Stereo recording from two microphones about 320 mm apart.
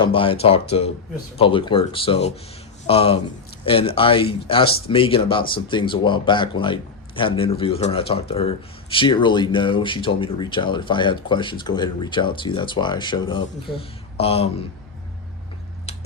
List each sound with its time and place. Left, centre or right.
0.0 s speech: centre